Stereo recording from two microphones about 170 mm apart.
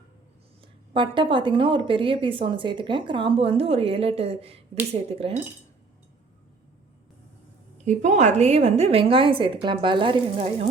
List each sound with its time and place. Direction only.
0.9 s a woman's voice: 30° right (ahead or behind)
7.9 s a woman's voice: 45° right (ahead or behind)